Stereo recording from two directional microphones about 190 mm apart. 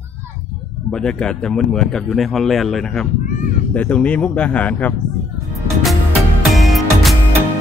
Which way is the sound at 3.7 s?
5° left (ahead or behind).